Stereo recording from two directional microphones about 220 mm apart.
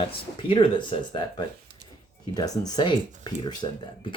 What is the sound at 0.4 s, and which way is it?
Speech, 25° left (ahead or behind).